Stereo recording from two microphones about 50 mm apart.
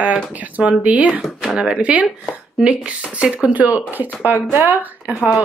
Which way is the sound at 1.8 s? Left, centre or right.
Right.